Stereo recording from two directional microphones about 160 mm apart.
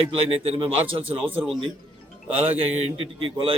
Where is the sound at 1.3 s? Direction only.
10° right (ahead or behind).